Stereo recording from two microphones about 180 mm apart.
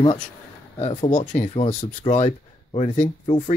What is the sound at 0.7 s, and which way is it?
Speech, 35° left (ahead or behind).